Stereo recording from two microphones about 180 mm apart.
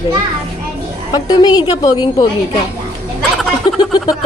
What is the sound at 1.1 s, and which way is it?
A woman's voice, 20° left (ahead or behind).